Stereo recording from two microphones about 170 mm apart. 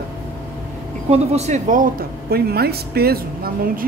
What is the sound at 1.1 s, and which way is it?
Speech, 40° right (ahead or behind).